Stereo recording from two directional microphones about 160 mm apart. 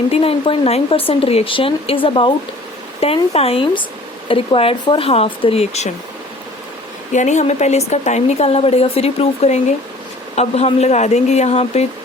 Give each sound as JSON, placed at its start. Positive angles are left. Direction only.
{"t": 0.1, "sound": "speech", "side_deg": 35}
{"t": 7.1, "sound": "a woman's voice", "side_deg": 50}